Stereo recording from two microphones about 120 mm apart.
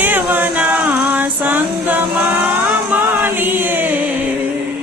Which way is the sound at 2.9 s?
15° right (ahead or behind).